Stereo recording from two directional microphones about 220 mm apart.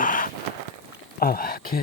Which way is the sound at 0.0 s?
40° left (ahead or behind).